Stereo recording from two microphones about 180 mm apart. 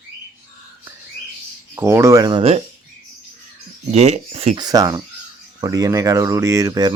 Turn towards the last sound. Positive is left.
turn(degrees=-20)  # may be behind; listen again after turning